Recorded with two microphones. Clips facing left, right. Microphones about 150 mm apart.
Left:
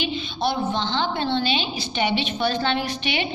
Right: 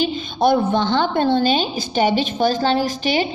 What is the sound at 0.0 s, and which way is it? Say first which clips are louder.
A woman's voice: right 7 dB; 50° right (ahead or behind).